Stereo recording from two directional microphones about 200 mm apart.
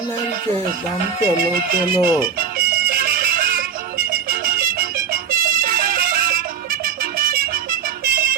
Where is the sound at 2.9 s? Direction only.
50° right (ahead or behind).